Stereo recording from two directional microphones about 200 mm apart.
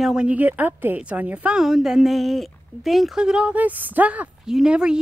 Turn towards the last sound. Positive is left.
turn(degrees=-5)  # may be behind; listen again after turning